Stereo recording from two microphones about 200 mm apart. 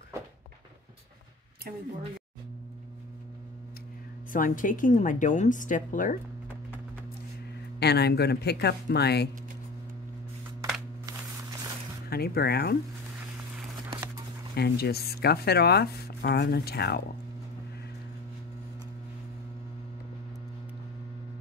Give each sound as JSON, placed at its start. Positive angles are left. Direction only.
{"t": 4.3, "sound": "a woman's voice", "side_deg": 40}
{"t": 7.8, "sound": "speech", "side_deg": 55}
{"t": 12.1, "sound": "speech", "side_deg": 50}
{"t": 13.8, "sound": "a sound", "side_deg": -15}
{"t": 14.5, "sound": "speech", "side_deg": 50}